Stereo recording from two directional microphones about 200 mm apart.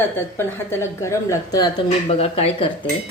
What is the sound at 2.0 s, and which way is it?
Speech, 30° left (ahead or behind).